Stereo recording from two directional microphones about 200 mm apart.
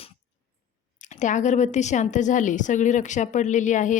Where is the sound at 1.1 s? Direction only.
40° left (ahead or behind).